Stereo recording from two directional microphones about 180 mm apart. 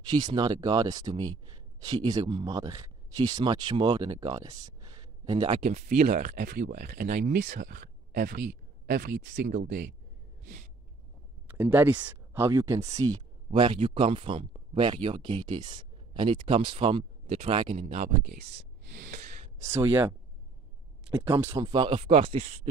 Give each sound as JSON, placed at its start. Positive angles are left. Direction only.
{"t": 0.1, "sound": "speech", "side_deg": -25}
{"t": 5.7, "sound": "speech", "side_deg": -45}
{"t": 8.8, "sound": "speech", "side_deg": -65}
{"t": 9.6, "sound": "speech", "side_deg": -70}
{"t": 10.4, "sound": "a sound", "side_deg": -45}
{"t": 11.4, "sound": "speech", "side_deg": -10}
{"t": 13.5, "sound": "speech", "side_deg": -30}
{"t": 19.0, "sound": "gasp", "side_deg": -45}
{"t": 19.6, "sound": "speech", "side_deg": -15}
{"t": 21.4, "sound": "speech", "side_deg": -15}
{"t": 21.6, "sound": "speech", "side_deg": -30}